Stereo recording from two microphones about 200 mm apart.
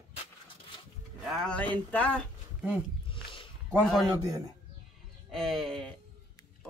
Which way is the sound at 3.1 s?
25° left (ahead or behind).